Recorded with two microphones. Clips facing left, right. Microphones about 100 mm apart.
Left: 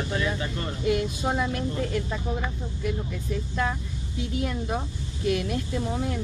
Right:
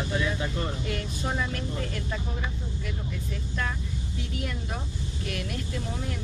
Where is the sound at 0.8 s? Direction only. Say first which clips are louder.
Left 7 dB; 20° left (ahead or behind).